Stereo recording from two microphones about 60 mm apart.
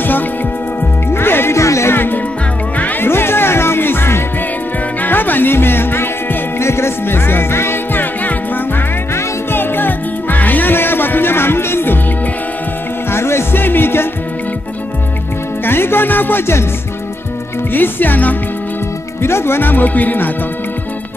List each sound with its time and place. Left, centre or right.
1.1 s music: left
1.6 s music: left
2.8 s music: left
13.1 s music: left
15.6 s music: left
17.7 s speech: left
19.2 s speech: left